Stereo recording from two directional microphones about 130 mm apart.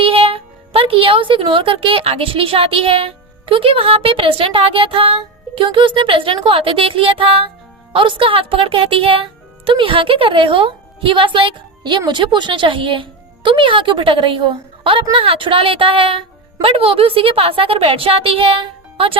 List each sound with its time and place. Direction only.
0.0 s speech: 45° right (ahead or behind)